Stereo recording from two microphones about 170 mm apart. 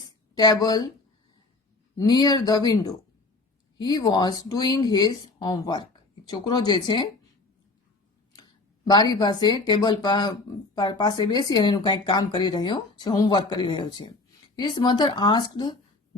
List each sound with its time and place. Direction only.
0.0 s a sound: 25° left (ahead or behind)
2.0 s speech: 25° left (ahead or behind)
8.3 s speech: 25° left (ahead or behind)